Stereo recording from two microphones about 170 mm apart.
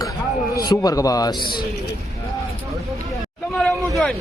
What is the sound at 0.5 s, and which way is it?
Speech, 20° left (ahead or behind).